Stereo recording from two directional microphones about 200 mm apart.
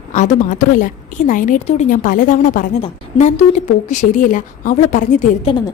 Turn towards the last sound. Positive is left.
turn(degrees=40)  # may be behind; listen again after turning